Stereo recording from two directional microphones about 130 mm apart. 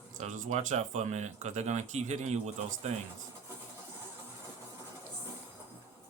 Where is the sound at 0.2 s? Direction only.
70° right (ahead or behind).